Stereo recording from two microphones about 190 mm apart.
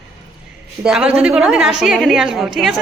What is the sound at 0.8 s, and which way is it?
A woman's voice, 5° right (ahead or behind).